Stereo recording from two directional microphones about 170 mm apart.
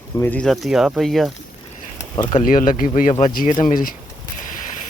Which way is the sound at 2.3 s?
50° left (ahead or behind).